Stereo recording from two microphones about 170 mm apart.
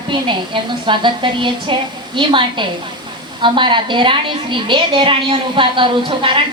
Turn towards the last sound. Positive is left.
turn(degrees=-30)  # may be behind; listen again after turning